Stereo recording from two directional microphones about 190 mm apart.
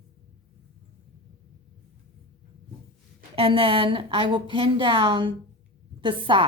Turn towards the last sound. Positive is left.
turn(degrees=-25)  # may be behind; listen again after turning